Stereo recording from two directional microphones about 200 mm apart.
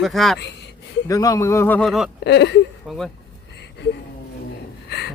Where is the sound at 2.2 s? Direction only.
60° left (ahead or behind).